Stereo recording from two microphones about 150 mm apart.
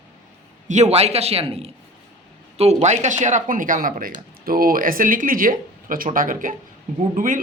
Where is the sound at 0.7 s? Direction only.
50° right (ahead or behind).